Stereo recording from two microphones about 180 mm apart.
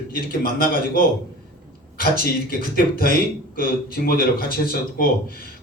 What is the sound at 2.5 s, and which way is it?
Speech, 55° left (ahead or behind).